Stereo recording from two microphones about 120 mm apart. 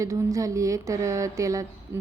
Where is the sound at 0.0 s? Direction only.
25° right (ahead or behind).